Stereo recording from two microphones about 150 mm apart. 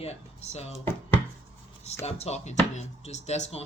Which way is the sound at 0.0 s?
45° left (ahead or behind).